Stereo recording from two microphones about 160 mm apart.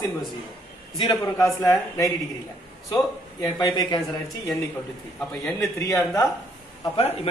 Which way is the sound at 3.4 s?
25° left (ahead or behind).